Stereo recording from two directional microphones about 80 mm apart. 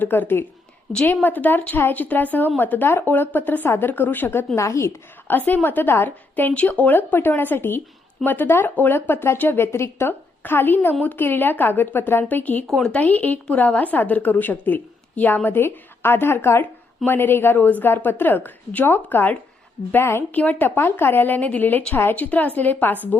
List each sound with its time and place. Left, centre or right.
0.0 s speech: left
4.5 s a woman's voice: left
5.3 s speech: left
12.6 s speech: centre
12.9 s a woman's voice: left
20.3 s speech: left